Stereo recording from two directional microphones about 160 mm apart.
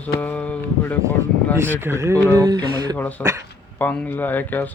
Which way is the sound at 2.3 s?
20° right (ahead or behind).